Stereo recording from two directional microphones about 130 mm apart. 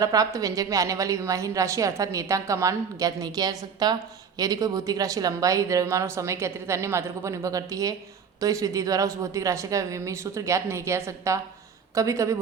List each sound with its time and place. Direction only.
0.0 s a woman's voice: 25° right (ahead or behind)